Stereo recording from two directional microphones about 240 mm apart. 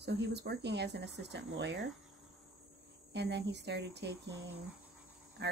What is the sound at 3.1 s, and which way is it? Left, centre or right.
Speech, right.